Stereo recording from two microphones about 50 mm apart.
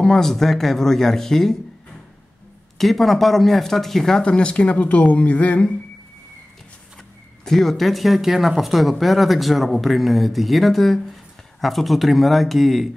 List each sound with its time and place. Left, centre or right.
0.0 s speech: centre
2.8 s speech: centre
4.2 s speech: left
7.4 s speech: centre